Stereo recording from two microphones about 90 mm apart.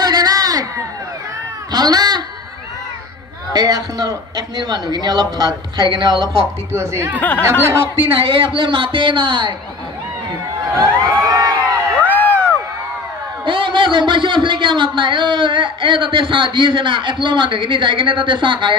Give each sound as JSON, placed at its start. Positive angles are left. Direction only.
{"t": 0.0, "sound": "a sound", "side_deg": -50}
{"t": 3.5, "sound": "a man's voice", "side_deg": -45}
{"t": 6.7, "sound": "speech", "side_deg": -30}
{"t": 7.2, "sound": "speech", "side_deg": 20}
{"t": 7.6, "sound": "speech", "side_deg": -30}
{"t": 8.0, "sound": "a man's voice", "side_deg": -80}
{"t": 11.0, "sound": "a sound", "side_deg": -45}
{"t": 12.0, "sound": "crowd", "side_deg": 20}
{"t": 13.5, "sound": "a man's voice", "side_deg": -65}